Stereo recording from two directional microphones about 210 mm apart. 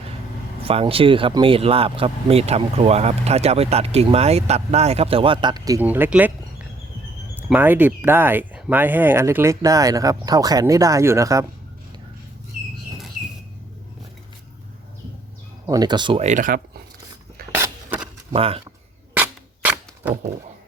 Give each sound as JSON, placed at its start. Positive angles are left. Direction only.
{"t": 0.6, "sound": "speech", "side_deg": -25}
{"t": 7.3, "sound": "speech", "side_deg": -10}
{"t": 15.6, "sound": "speech", "side_deg": -20}
{"t": 17.5, "sound": "a sound", "side_deg": -10}
{"t": 18.3, "sound": "speech", "side_deg": -25}
{"t": 19.1, "sound": "a sound", "side_deg": -10}